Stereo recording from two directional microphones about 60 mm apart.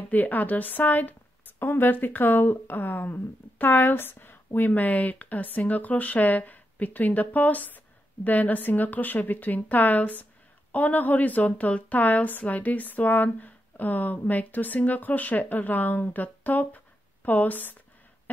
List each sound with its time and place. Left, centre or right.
0.1 s speech: left